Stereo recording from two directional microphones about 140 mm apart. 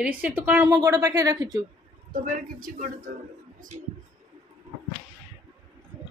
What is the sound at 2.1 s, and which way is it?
Speech, 70° right (ahead or behind).